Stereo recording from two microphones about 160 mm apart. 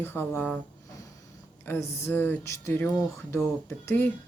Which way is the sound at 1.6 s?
15° left (ahead or behind).